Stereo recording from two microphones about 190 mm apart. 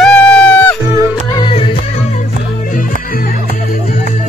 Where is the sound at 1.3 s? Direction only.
25° left (ahead or behind).